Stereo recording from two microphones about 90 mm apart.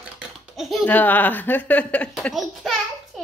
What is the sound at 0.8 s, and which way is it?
Speech, 20° left (ahead or behind).